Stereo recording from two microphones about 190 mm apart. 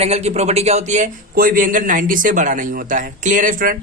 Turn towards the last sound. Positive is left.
turn(degrees=-45)  # may be behind; listen again after turning